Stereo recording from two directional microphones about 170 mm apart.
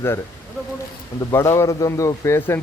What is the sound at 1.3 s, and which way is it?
Speech, 15° left (ahead or behind).